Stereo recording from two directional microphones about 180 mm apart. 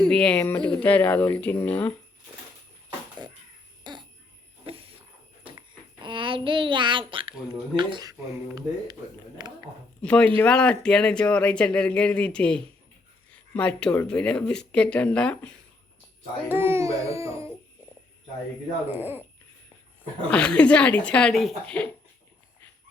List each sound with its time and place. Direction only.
0.1 s speech: 5° left (ahead or behind)
3.2 s a sound: 25° right (ahead or behind)
5.5 s a child's voice: 25° right (ahead or behind)
9.4 s speech: 25° right (ahead or behind)
10.0 s speech: 5° left (ahead or behind)
16.5 s speech: 15° right (ahead or behind)
18.9 s speech: 10° right (ahead or behind)
20.3 s speech: 5° left (ahead or behind)